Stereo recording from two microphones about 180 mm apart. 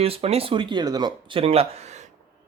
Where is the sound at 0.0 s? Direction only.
35° right (ahead or behind).